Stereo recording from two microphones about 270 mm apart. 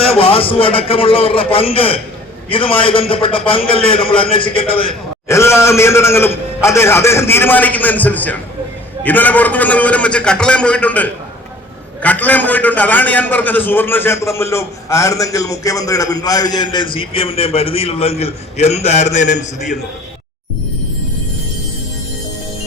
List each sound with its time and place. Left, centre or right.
0.0 s a man's voice: left
4.9 s a man's voice: centre; by 19.5 s left